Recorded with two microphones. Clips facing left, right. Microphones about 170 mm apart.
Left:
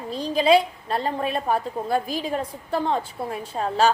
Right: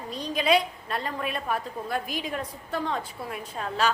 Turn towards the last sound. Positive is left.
turn(degrees=30)  # may be behind; listen again after turning